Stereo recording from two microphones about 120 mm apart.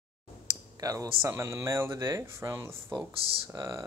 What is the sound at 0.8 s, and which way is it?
Speech, 30° right (ahead or behind).